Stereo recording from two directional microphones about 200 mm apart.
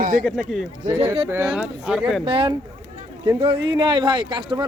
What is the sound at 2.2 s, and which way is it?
Speech, 25° right (ahead or behind).